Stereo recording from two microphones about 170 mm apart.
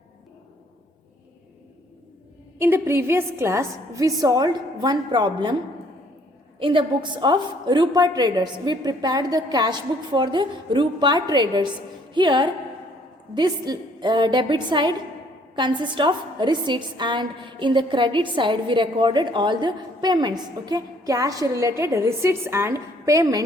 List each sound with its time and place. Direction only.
2.6 s a woman's voice: 15° right (ahead or behind)
6.6 s a woman's voice: 30° right (ahead or behind)